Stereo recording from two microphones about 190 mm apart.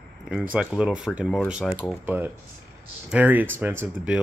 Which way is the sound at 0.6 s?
5° right (ahead or behind).